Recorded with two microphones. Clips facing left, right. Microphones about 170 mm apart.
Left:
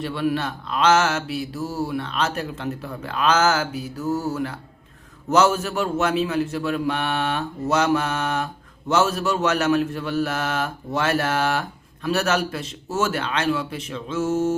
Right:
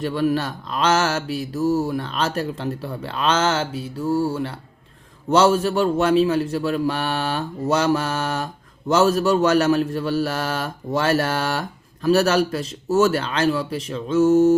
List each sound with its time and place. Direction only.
0.0 s mantra: 40° right (ahead or behind)